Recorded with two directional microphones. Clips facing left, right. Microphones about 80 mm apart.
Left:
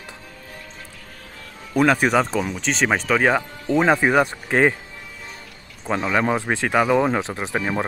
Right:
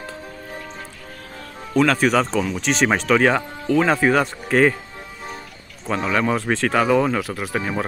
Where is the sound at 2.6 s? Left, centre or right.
Centre; by 4.7 s left.